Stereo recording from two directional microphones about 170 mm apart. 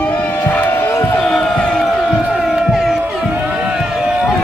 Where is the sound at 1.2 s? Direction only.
Centre (ahead or behind).